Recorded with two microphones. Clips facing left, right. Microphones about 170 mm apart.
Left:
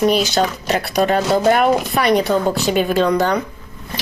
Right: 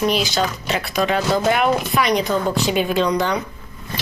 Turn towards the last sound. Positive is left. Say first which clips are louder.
# left 3 dB
turn(degrees=45)  # may be behind; listen again after turning